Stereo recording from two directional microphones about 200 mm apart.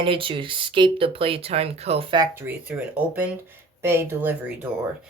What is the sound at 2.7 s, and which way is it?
Speech, 10° right (ahead or behind).